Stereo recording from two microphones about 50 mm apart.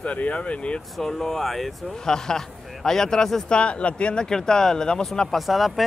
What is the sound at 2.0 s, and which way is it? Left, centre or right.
A man's voice, centre.